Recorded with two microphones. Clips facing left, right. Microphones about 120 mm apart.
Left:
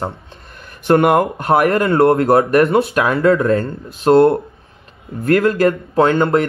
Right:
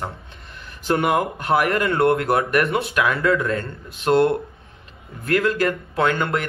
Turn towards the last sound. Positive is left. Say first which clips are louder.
# left 8 dB
turn(degrees=30)  # may be behind; listen again after turning